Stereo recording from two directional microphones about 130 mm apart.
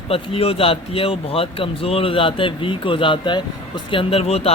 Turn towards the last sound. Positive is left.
turn(degrees=50)  # may be behind; listen again after turning